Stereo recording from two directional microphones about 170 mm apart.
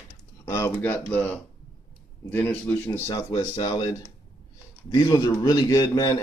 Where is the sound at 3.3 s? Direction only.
25° left (ahead or behind).